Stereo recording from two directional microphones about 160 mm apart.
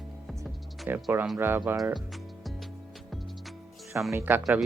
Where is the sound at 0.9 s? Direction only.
15° right (ahead or behind).